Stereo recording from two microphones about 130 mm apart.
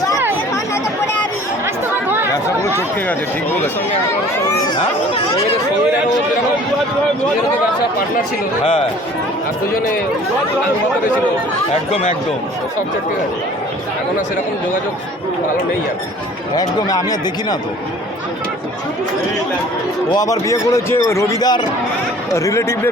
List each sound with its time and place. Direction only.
0.5 s chatter: 20° left (ahead or behind)
1.6 s chatter: 15° right (ahead or behind)
2.3 s chatter: 20° left (ahead or behind)
4.4 s speech: 30° left (ahead or behind)
16.6 s a man's voice: 30° left (ahead or behind)
20.1 s a man's voice: 25° left (ahead or behind)